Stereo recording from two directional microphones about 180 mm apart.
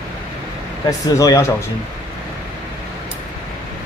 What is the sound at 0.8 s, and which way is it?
Speech, 20° left (ahead or behind).